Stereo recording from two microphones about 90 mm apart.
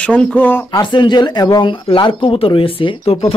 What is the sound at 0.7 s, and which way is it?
Speech, 60° left (ahead or behind).